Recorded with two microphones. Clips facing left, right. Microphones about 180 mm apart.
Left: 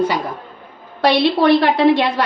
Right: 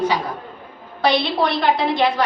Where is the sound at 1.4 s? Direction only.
65° left (ahead or behind).